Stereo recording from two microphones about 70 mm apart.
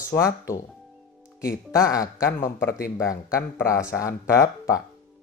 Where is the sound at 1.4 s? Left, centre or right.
Left.